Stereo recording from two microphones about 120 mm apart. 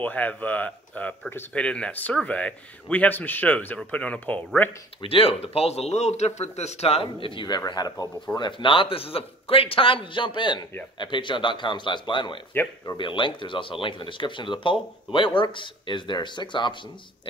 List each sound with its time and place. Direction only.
0.0 s speech: 15° left (ahead or behind)
5.0 s a man's voice: 50° left (ahead or behind)